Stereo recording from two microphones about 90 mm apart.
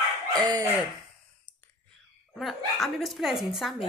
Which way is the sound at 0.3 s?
45° right (ahead or behind).